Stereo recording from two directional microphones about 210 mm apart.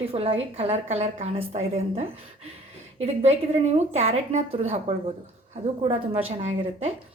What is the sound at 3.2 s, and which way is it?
A woman's voice, 30° right (ahead or behind).